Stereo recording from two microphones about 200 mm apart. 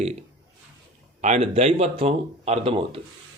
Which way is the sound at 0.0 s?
30° right (ahead or behind).